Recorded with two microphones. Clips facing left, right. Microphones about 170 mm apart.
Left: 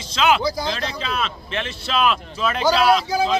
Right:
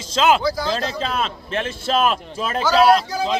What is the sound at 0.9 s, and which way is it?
Speech, 45° right (ahead or behind).